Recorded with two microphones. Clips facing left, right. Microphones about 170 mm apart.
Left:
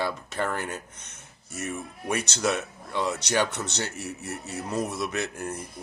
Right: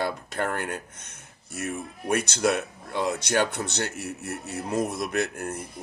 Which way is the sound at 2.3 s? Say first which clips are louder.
Right 3 dB; 55° right (ahead or behind).